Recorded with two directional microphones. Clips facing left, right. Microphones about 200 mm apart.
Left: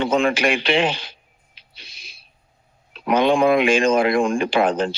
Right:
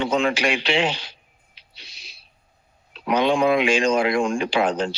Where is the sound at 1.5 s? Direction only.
50° left (ahead or behind).